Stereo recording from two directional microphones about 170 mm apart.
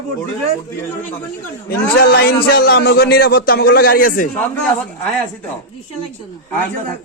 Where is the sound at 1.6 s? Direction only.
65° left (ahead or behind).